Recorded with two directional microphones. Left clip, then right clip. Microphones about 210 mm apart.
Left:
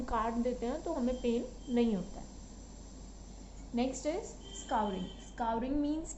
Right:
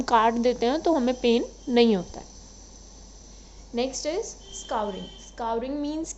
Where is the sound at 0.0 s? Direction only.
55° right (ahead or behind).